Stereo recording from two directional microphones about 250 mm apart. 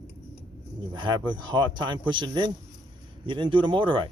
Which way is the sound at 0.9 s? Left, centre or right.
Centre.